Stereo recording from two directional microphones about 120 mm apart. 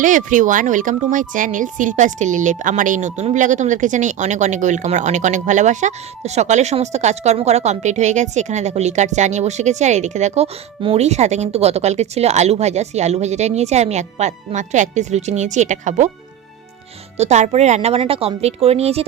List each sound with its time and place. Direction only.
0.0 s speech: 90° right
17.2 s speech: 70° right (ahead or behind)